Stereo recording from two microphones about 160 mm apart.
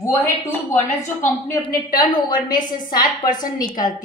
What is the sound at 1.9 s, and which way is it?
Speech, 30° left (ahead or behind).